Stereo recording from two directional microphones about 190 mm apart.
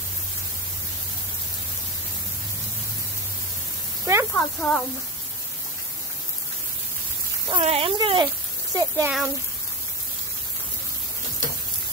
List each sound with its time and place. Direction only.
4.0 s snake: 15° right (ahead or behind)
4.3 s speech: 5° left (ahead or behind)
7.4 s speech: 30° right (ahead or behind)
8.7 s a child's voice: 15° right (ahead or behind)